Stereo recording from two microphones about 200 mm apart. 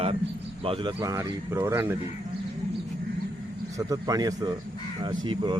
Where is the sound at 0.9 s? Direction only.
10° right (ahead or behind).